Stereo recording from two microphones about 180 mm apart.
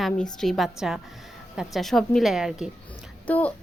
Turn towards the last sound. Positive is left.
turn(degrees=10)  # may be behind; listen again after turning